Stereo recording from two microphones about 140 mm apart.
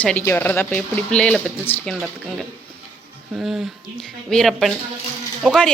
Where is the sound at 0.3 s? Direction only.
15° left (ahead or behind).